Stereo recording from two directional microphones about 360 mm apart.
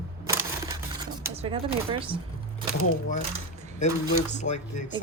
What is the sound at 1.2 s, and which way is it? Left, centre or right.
Speech, centre.